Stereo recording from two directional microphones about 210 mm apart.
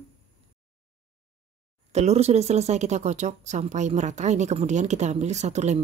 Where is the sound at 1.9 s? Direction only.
30° right (ahead or behind).